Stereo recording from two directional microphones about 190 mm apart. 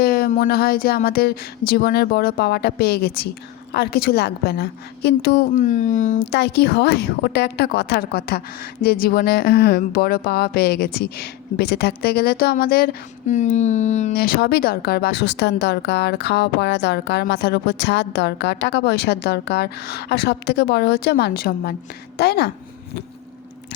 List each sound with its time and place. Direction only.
0.0 s a woman's voice: 55° left (ahead or behind)
6.3 s a woman's voice: 60° left (ahead or behind); by 14.2 s 40° left (ahead or behind)
14.2 s a woman's voice: 55° left (ahead or behind)